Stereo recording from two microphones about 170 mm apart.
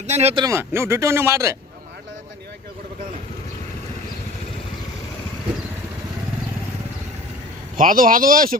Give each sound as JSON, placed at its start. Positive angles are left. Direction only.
{"t": 0.1, "sound": "speech", "side_deg": -40}
{"t": 0.4, "sound": "speech", "side_deg": -15}
{"t": 7.8, "sound": "speech", "side_deg": -55}